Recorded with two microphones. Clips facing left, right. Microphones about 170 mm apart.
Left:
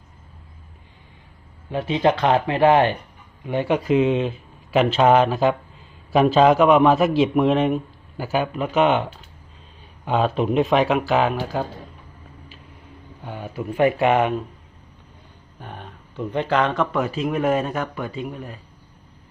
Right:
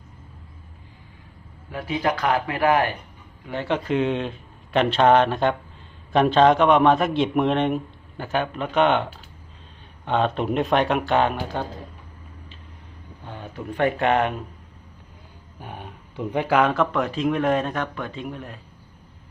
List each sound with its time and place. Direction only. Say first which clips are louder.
1.7 s speech: left 5 dB; 25° left (ahead or behind); by 9.0 s 5° left (ahead or behind)
10.1 s speech: left 2 dB; 5° left (ahead or behind)
13.2 s speech: left 4 dB; 10° left (ahead or behind)
15.6 s speech: even; 10° right (ahead or behind)